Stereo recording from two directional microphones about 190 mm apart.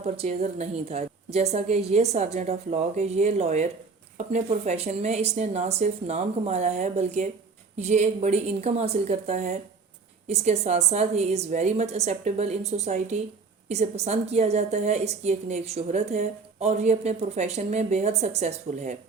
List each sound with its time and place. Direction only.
0.0 s a woman's voice: 30° right (ahead or behind)